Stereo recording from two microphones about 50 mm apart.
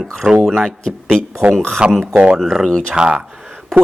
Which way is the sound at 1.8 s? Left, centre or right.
Centre.